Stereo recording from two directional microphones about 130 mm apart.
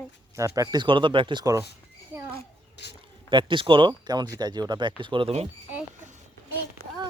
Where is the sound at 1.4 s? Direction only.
25° right (ahead or behind).